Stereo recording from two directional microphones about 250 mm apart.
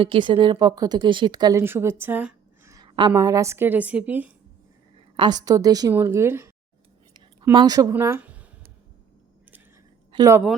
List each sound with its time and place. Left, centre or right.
0.0 s a woman's voice: centre
5.1 s a woman's voice: centre
7.1 s a sound: centre
10.1 s speech: centre